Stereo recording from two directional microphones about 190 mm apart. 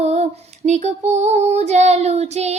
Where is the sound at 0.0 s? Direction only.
35° right (ahead or behind).